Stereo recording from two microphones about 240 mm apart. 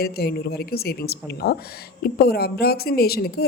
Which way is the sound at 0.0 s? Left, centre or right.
Left.